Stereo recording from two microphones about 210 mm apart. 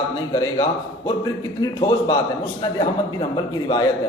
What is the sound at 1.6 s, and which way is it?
Speech, 20° left (ahead or behind).